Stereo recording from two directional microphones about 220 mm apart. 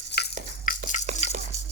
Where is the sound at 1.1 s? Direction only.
35° right (ahead or behind).